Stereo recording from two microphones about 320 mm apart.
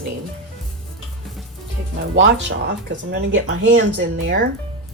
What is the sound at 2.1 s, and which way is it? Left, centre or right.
A woman's voice, right.